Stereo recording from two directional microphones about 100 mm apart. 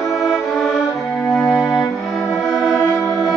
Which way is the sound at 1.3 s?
Centre (ahead or behind).